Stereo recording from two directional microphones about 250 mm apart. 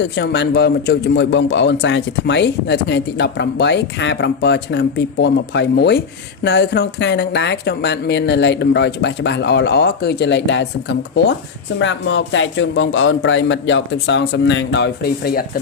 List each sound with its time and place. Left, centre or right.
0.0 s a man's voice: left